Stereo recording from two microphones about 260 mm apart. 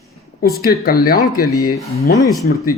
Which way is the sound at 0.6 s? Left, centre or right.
Left.